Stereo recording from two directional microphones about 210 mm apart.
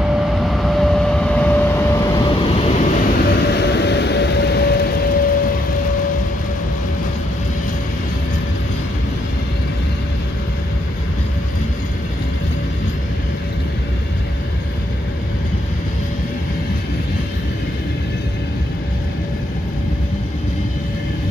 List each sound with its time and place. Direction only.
0.0 s vehicle: centre (ahead or behind); by 2.7 s 20° left (ahead or behind)
2.8 s vehicle: 35° left (ahead or behind)